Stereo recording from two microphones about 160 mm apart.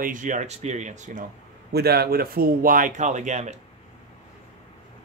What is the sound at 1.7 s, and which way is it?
Speech, 80° right.